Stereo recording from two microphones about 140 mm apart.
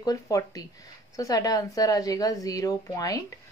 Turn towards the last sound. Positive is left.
turn(degrees=25)  # may be behind; listen again after turning